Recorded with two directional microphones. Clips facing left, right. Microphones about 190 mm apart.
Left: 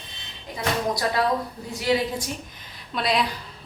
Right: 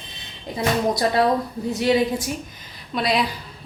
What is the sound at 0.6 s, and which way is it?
Speech, 25° right (ahead or behind).